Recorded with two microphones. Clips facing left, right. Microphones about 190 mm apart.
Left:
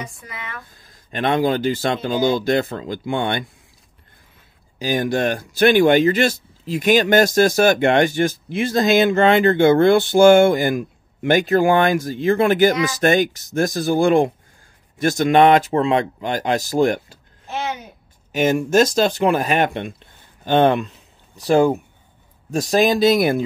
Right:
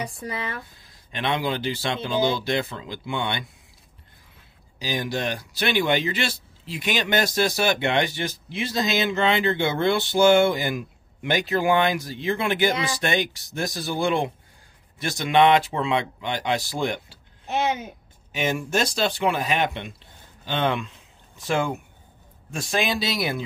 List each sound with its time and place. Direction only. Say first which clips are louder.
0.0 s speech: right 3 dB; 35° right (ahead or behind)
0.7 s speech: left 7 dB; 45° left (ahead or behind)
4.7 s speech: left 7 dB; 50° left (ahead or behind)
17.5 s a sound: right 2 dB; 20° right (ahead or behind)
18.3 s speech: left 8 dB; 45° left (ahead or behind)